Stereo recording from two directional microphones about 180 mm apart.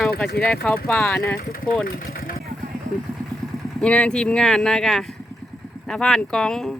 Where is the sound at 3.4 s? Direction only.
Centre (ahead or behind).